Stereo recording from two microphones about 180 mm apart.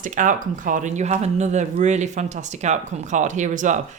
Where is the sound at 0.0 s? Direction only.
45° right (ahead or behind).